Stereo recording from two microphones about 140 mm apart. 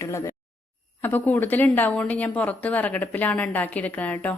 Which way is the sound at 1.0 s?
15° left (ahead or behind).